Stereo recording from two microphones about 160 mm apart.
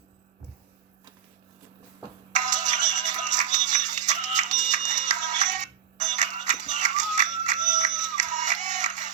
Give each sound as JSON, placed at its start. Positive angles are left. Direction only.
{"t": 2.3, "sound": "music", "side_deg": -50}